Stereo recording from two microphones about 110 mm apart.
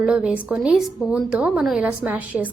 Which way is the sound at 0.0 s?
10° right (ahead or behind).